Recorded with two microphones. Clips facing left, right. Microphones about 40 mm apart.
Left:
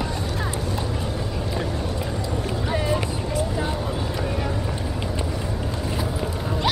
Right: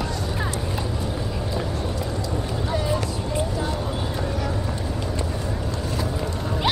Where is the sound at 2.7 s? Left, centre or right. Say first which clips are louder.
Left 1 dB; left.